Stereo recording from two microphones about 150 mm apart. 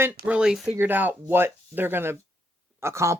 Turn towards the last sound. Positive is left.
turn(degrees=-20)  # may be behind; listen again after turning